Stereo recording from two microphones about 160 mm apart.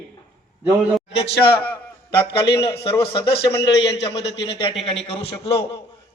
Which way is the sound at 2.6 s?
35° left (ahead or behind).